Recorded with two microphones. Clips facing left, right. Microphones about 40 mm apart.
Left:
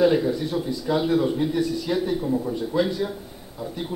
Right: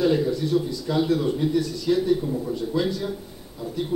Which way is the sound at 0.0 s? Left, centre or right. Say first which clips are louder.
Left 2 dB; centre.